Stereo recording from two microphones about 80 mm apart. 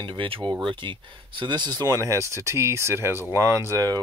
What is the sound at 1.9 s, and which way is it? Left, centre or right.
Speech, right.